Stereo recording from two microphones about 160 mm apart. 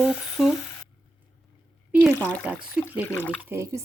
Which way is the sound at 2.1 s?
10° left (ahead or behind).